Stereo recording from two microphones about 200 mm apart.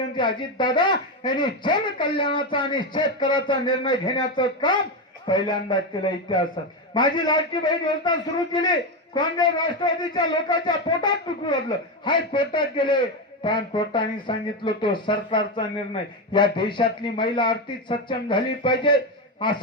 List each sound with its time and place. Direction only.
0.2 s speech: 25° left (ahead or behind)